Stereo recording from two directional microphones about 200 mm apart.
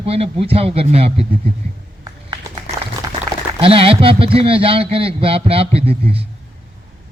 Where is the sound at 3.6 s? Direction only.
30° right (ahead or behind).